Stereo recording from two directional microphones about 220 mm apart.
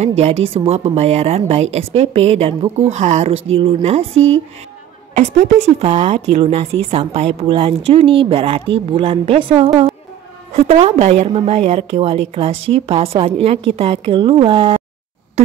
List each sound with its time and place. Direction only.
0.0 s a woman's voice: 30° right (ahead or behind)
4.1 s speech: 60° right (ahead or behind)
5.1 s a woman's voice: 30° right (ahead or behind)